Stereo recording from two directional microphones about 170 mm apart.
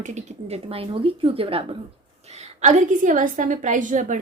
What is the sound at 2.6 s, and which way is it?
Speech, 45° right (ahead or behind).